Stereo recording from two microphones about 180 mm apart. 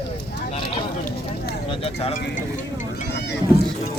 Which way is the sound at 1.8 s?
35° left (ahead or behind).